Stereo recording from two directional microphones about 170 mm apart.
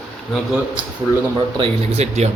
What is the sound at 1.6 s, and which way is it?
Speech, 40° right (ahead or behind).